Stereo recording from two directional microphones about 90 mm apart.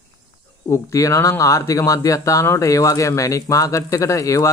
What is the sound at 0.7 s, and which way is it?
Speech, 35° left (ahead or behind).